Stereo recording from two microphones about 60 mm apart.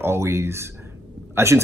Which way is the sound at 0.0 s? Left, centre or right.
Right.